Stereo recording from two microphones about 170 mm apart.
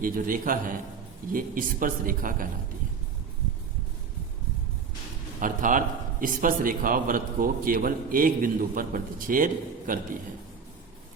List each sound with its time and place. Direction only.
0.0 s a man's voice: 55° right (ahead or behind)
5.4 s a man's voice: 50° right (ahead or behind)